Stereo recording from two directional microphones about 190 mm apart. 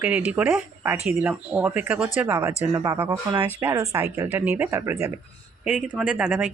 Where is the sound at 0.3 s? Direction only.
5° right (ahead or behind).